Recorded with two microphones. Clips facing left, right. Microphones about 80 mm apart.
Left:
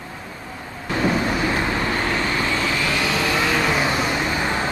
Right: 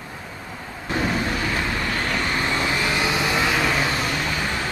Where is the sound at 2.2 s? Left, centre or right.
Right.